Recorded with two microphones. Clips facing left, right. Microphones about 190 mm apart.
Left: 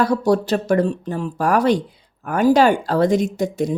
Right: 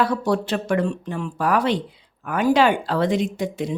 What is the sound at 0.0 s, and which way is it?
A woman's voice, 40° left (ahead or behind).